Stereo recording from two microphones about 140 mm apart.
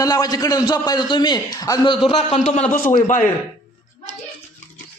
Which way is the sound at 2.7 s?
80° left.